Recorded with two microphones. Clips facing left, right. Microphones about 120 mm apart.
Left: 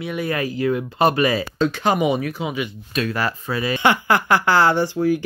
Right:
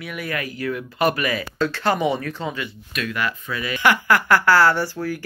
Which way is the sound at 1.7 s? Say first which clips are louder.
Left 1 dB; 15° left (ahead or behind).